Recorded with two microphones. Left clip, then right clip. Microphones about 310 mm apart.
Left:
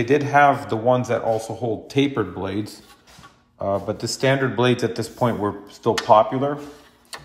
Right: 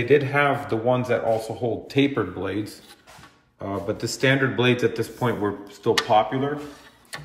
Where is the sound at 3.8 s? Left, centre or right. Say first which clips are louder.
Left 1 dB; centre.